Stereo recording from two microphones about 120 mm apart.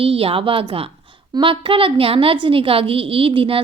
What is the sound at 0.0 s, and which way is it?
A woman's voice, 50° right (ahead or behind).